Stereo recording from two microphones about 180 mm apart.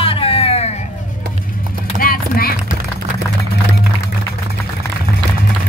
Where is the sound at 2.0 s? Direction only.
55° left (ahead or behind).